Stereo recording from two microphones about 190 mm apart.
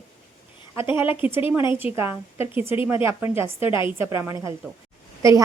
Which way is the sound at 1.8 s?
10° right (ahead or behind).